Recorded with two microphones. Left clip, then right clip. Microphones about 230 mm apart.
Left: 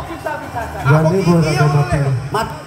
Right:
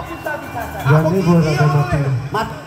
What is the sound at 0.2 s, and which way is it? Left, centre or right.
Speech, left.